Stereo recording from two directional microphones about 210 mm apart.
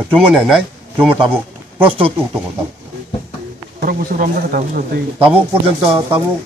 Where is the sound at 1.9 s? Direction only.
25° right (ahead or behind).